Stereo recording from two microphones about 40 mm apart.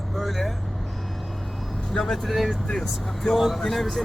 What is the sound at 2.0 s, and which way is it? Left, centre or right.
Speech, centre.